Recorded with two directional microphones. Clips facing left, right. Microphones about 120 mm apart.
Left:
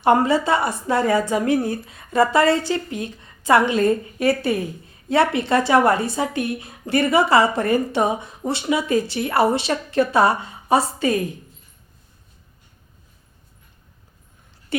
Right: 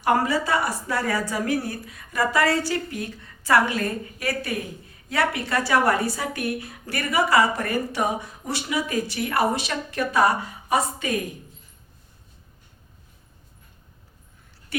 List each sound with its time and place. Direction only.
0.0 s speech: 25° left (ahead or behind)
14.7 s speech: 25° left (ahead or behind)